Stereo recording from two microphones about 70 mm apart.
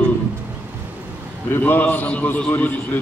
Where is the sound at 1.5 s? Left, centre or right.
Left.